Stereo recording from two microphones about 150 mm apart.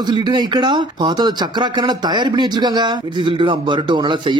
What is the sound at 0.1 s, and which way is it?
Speech, 30° right (ahead or behind).